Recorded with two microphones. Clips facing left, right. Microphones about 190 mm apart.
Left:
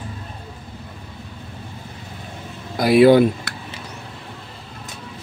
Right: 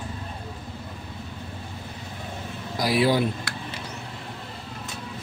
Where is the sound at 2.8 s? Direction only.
60° left (ahead or behind).